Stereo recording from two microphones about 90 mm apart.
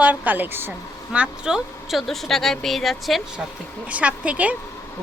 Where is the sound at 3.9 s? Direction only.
15° right (ahead or behind).